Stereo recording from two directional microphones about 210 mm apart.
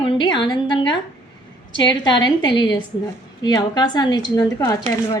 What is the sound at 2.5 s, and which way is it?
A woman's voice, 20° left (ahead or behind).